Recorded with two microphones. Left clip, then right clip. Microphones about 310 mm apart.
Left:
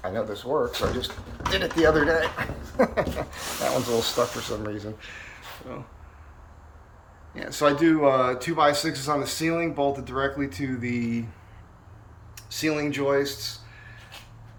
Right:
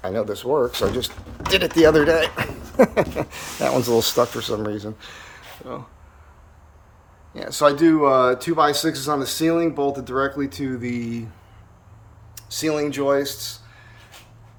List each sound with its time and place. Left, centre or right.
0.0 s speech: right
7.3 s speech: centre
12.5 s speech: centre